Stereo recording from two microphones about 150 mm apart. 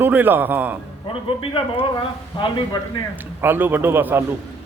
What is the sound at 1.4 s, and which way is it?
Speech, 35° left (ahead or behind).